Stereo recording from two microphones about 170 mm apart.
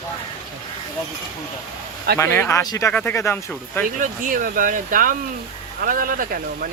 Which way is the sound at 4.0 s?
50° right (ahead or behind).